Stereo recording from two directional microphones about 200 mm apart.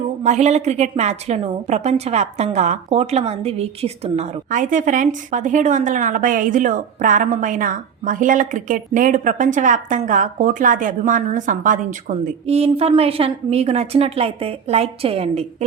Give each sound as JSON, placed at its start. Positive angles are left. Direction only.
{"t": 0.2, "sound": "a woman's voice", "side_deg": -35}